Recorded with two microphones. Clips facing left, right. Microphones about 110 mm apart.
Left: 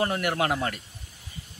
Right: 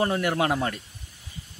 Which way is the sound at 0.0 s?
20° right (ahead or behind).